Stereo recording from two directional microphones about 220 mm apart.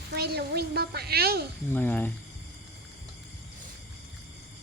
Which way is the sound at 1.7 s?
10° left (ahead or behind).